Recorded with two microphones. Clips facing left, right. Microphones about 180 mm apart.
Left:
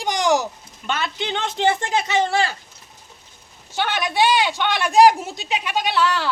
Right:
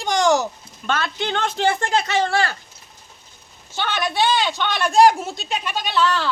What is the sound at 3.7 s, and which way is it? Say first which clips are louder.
A man's voice: left 1 dB; 15° left (ahead or behind).